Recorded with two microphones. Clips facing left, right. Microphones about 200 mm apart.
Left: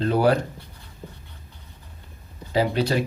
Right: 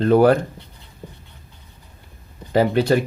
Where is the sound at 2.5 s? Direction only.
50° right (ahead or behind).